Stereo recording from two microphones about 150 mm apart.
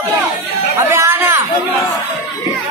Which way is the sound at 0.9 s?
15° right (ahead or behind).